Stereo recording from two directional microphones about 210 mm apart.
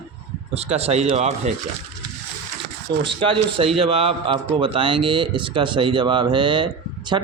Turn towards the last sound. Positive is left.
turn(degrees=-20)  # may be behind; listen again after turning